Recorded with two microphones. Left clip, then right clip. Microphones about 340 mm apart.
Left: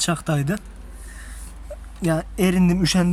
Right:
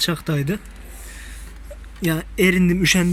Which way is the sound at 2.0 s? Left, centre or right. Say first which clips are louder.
Right 3 dB; centre.